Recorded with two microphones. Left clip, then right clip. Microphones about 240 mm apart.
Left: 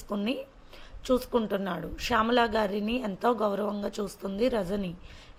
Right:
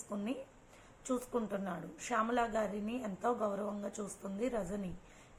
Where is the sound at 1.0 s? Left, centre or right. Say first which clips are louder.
Left 11 dB; left.